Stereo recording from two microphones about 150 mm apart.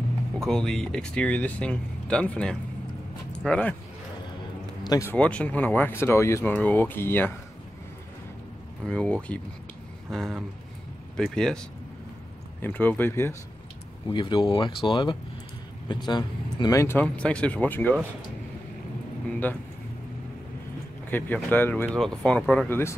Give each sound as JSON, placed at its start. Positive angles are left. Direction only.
{"t": 0.4, "sound": "speech", "side_deg": 5}
{"t": 4.8, "sound": "speech", "side_deg": 25}
{"t": 5.1, "sound": "speech", "side_deg": 10}
{"t": 8.8, "sound": "speech", "side_deg": 5}
{"t": 12.6, "sound": "speech", "side_deg": 10}
{"t": 14.1, "sound": "speech", "side_deg": 35}
{"t": 16.8, "sound": "speech", "side_deg": 10}
{"t": 21.1, "sound": "speech", "side_deg": 10}
{"t": 22.7, "sound": "speech", "side_deg": 15}